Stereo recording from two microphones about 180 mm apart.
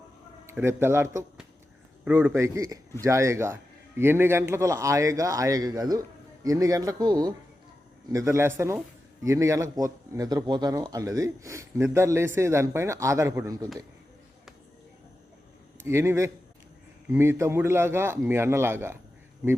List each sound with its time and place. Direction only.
0.4 s speech: 15° right (ahead or behind)
15.8 s speech: 15° right (ahead or behind)